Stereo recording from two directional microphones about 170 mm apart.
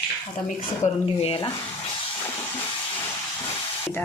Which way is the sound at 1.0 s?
35° left (ahead or behind).